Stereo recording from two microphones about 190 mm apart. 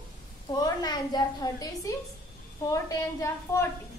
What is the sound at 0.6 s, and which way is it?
A woman's voice, 20° left (ahead or behind).